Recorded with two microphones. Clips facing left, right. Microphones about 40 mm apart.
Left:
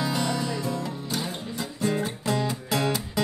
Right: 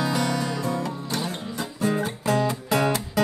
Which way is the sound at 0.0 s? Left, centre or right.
Centre.